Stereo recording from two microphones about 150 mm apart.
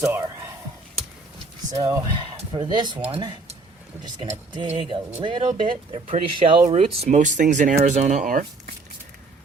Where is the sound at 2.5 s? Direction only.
30° right (ahead or behind).